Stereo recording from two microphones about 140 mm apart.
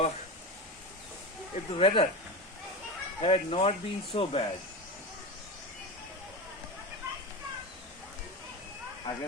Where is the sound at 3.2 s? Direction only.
45° left (ahead or behind).